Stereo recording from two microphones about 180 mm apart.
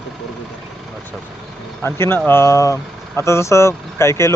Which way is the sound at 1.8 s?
15° left (ahead or behind).